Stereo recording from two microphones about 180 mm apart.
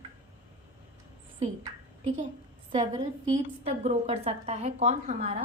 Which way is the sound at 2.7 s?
35° right (ahead or behind).